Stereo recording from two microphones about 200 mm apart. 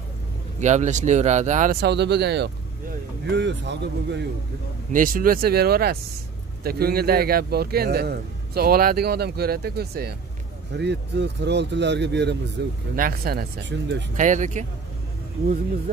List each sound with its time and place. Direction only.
0.6 s speech: 35° right (ahead or behind); by 4.2 s 60° right (ahead or behind)
4.9 s a man's voice: 45° right (ahead or behind); by 12.7 s 60° right (ahead or behind)
12.9 s a man's voice: 45° right (ahead or behind)
14.1 s speech: 40° right (ahead or behind)